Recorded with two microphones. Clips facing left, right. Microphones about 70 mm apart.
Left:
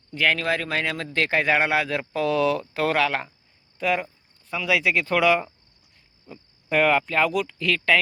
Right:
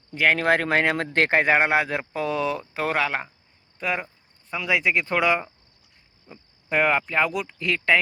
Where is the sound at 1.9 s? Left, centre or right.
Centre.